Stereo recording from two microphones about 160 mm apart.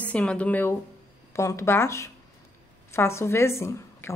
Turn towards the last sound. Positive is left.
turn(degrees=15)  # may be behind; listen again after turning